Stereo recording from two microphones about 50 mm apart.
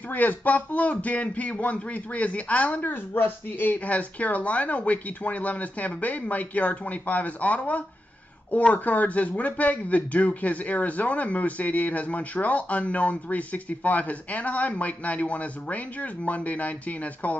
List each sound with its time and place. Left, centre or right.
0.1 s speech: left
2.9 s speech: left
3.7 s speech: left